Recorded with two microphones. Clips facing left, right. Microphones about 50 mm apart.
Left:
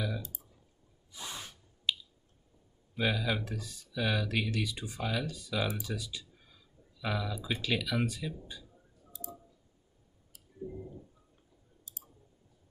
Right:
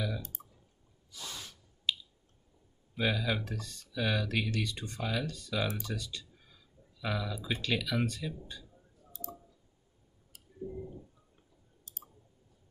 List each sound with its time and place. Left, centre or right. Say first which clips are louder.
0.2 s clicking: even; right
1.1 s gasp: left 1 dB; left
1.9 s squish: even; centre
2.9 s speech: even; centre
11.9 s clicking: even; right